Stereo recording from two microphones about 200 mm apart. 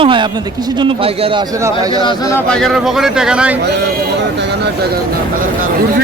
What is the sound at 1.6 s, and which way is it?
Speech, 15° right (ahead or behind).